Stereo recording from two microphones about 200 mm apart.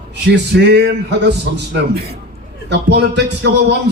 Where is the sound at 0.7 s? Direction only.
55° right (ahead or behind).